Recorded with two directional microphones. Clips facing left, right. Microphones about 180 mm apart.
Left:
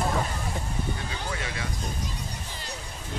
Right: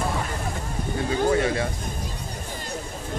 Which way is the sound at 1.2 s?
40° right (ahead or behind).